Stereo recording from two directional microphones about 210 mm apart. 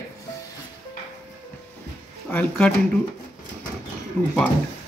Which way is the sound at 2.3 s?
5° left (ahead or behind).